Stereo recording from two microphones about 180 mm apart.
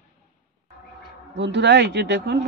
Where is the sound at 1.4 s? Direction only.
80° right.